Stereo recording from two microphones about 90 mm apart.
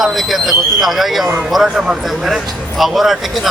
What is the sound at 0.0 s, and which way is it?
A man's voice, centre (ahead or behind).